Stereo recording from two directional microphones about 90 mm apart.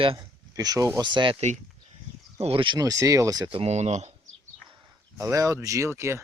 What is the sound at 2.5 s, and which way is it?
Speech, 75° right (ahead or behind).